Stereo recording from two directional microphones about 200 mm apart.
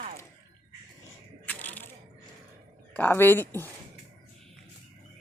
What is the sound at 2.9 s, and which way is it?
Speech, 10° left (ahead or behind).